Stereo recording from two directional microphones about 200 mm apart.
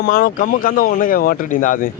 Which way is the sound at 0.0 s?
45° left (ahead or behind).